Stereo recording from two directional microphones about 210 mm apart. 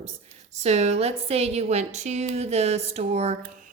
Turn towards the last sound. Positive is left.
turn(degrees=-30)  # may be behind; listen again after turning